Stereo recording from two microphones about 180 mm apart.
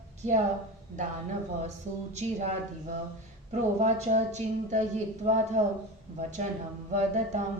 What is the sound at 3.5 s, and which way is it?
Speech, 40° right (ahead or behind).